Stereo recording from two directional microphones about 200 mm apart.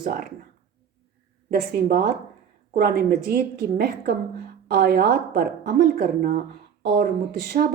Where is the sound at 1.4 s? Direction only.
50° right (ahead or behind).